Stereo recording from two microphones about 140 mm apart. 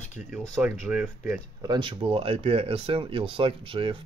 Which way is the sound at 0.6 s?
10° right (ahead or behind).